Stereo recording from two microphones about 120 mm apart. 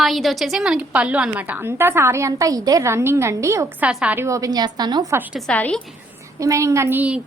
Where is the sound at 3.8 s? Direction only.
10° right (ahead or behind).